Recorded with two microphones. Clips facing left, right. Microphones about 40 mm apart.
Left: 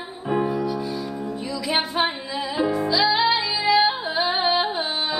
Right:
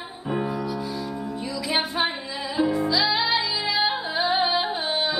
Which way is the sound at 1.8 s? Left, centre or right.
Centre.